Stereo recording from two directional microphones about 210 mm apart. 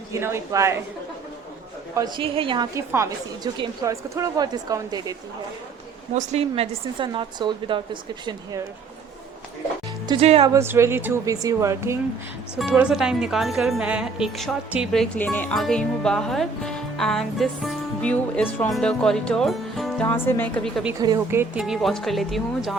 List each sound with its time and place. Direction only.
0.1 s a woman's voice: 10° right (ahead or behind)
2.0 s a woman's voice: 25° right (ahead or behind)
6.1 s a woman's voice: 30° right (ahead or behind)
10.1 s a woman's voice: 30° right (ahead or behind)
10.5 s a woman's voice: 10° right (ahead or behind); by 20.8 s 10° left (ahead or behind)
21.0 s a woman's voice: 15° right (ahead or behind)
21.6 s speech: centre (ahead or behind)